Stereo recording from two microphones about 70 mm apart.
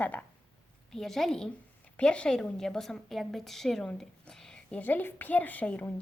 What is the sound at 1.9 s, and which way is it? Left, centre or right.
A woman's voice, centre.